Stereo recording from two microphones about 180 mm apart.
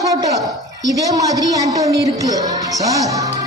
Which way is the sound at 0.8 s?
20° right (ahead or behind).